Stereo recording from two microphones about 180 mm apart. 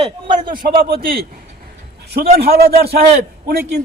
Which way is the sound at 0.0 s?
25° right (ahead or behind).